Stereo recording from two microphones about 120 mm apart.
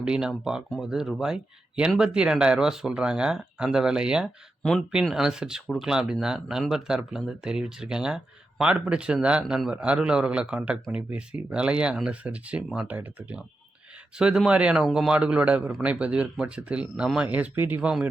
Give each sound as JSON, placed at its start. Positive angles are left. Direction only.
{"t": 0.0, "sound": "a man's voice", "side_deg": -5}
{"t": 12.9, "sound": "a man's voice", "side_deg": -15}
{"t": 17.7, "sound": "a man's voice", "side_deg": -10}